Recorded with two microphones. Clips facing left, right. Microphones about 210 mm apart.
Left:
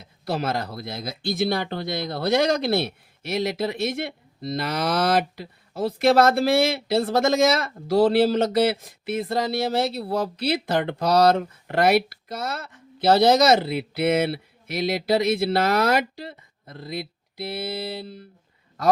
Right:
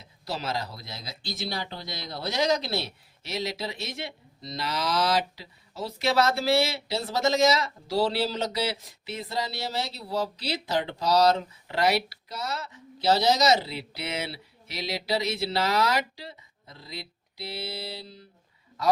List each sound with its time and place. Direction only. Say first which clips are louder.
0.3 s speech: left 6 dB; 55° left (ahead or behind)